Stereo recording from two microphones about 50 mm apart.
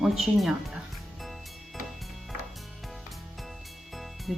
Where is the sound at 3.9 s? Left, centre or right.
Centre.